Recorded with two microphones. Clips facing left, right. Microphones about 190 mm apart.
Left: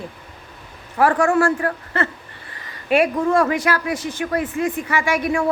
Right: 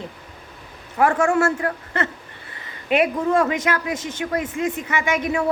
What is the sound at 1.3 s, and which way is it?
Speech, 20° right (ahead or behind).